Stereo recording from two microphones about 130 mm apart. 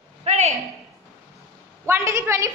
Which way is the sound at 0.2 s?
55° right (ahead or behind).